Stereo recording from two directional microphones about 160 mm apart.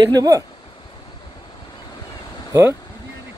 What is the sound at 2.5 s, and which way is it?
Speech, 15° right (ahead or behind).